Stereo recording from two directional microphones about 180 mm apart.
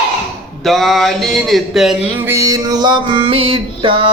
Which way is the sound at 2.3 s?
20° right (ahead or behind).